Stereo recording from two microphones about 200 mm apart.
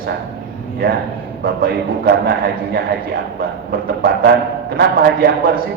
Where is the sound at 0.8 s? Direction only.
45° right (ahead or behind).